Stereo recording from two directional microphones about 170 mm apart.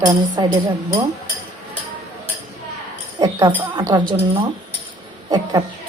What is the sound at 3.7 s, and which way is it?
Speech, 20° right (ahead or behind).